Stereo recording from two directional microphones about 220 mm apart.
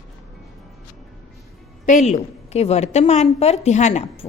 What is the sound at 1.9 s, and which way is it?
A woman's voice, 30° left (ahead or behind).